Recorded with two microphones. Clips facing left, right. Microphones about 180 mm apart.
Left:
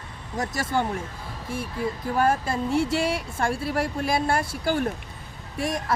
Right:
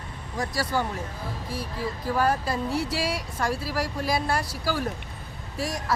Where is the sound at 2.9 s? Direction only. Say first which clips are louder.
Left 4 dB; 50° left (ahead or behind).